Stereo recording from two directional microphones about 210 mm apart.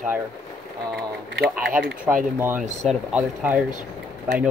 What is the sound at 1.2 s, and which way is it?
Speech, 50° right (ahead or behind).